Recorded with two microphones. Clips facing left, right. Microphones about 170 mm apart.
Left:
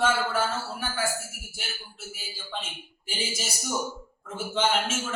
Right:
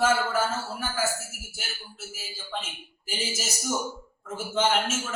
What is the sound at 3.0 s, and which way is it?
A man's voice, 5° right (ahead or behind).